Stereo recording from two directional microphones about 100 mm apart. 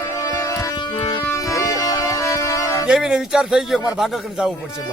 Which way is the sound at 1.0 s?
70° left (ahead or behind).